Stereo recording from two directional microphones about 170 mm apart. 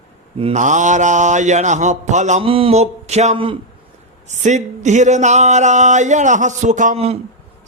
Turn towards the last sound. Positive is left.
turn(degrees=-50)  # may be behind; listen again after turning